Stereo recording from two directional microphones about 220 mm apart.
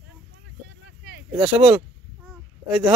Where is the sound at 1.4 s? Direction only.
5° right (ahead or behind).